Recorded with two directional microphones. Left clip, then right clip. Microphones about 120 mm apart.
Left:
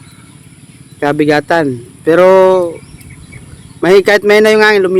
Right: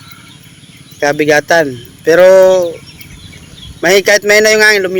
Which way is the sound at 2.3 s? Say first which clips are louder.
Right 1 dB; 50° left (ahead or behind).